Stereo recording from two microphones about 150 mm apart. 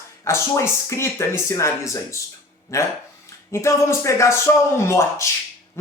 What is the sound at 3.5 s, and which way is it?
Speech, 20° left (ahead or behind).